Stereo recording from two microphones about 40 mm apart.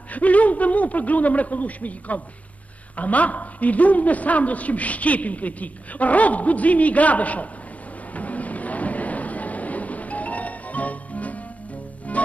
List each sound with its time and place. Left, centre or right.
0.1 s a man's voice: left
8.1 s a sound: left
12.1 s music: left